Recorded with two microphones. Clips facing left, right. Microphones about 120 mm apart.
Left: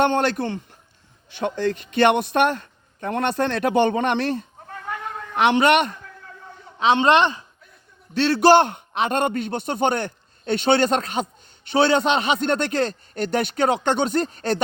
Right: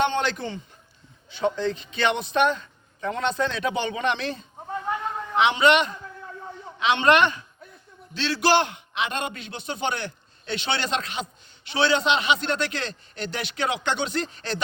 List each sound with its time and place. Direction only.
0.0 s a man's voice: 55° left (ahead or behind)
4.6 s a sound: 20° right (ahead or behind)
5.4 s a man's voice: 55° left (ahead or behind)
6.7 s a man's voice: 35° left (ahead or behind)
8.1 s a man's voice: 50° left (ahead or behind)